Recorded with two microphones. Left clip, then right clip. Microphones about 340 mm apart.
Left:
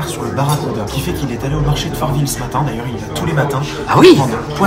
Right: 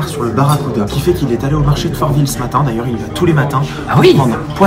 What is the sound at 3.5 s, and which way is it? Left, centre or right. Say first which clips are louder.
Speech: left 1 dB; centre.